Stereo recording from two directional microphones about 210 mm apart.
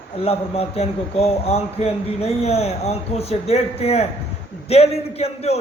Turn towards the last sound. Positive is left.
turn(degrees=30)  # may be behind; listen again after turning